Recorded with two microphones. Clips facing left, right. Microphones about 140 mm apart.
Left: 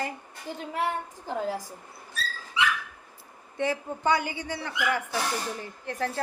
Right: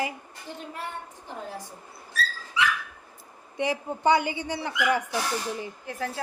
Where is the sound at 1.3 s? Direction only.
90° left.